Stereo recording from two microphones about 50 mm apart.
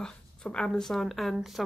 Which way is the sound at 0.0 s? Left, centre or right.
Centre.